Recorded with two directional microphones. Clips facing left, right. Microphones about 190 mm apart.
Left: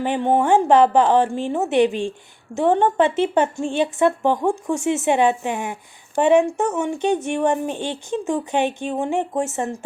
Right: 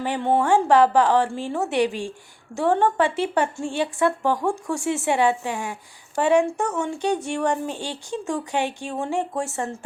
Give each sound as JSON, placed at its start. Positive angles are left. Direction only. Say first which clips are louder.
{"t": 0.0, "sound": "speech", "louder": "left 3 dB", "side_deg": 20}